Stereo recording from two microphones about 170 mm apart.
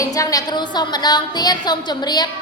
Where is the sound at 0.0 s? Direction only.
20° left (ahead or behind).